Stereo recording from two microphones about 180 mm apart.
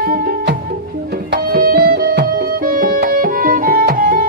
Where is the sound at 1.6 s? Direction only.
55° right (ahead or behind).